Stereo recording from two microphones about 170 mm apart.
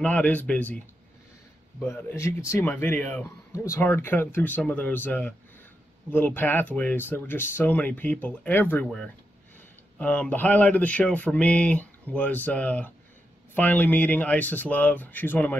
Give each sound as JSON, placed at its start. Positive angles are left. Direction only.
{"t": 0.0, "sound": "speech", "side_deg": 10}